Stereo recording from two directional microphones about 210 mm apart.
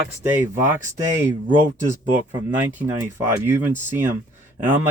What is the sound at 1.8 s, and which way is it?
Speech, 35° right (ahead or behind).